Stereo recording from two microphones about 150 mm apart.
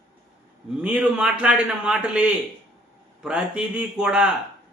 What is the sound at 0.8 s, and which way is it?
A man's voice, 5° right (ahead or behind).